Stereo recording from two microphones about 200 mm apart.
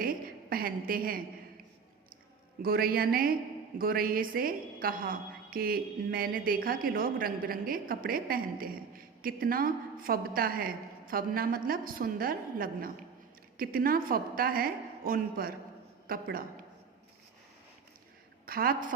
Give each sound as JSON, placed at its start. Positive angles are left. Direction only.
{"t": 0.0, "sound": "a sound", "side_deg": -45}
{"t": 2.6, "sound": "a woman's voice", "side_deg": -50}
{"t": 18.4, "sound": "a woman's voice", "side_deg": -45}